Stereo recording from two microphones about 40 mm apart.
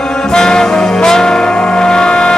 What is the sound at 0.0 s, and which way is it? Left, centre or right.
Brass instrument, centre.